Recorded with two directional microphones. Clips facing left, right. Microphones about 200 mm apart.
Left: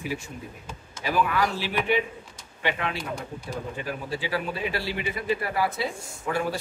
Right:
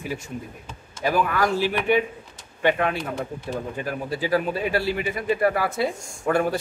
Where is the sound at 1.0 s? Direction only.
45° right (ahead or behind).